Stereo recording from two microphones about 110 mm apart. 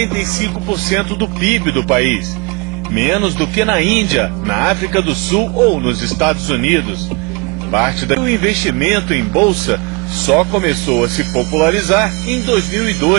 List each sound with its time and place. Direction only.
0.9 s speech: 5° right (ahead or behind)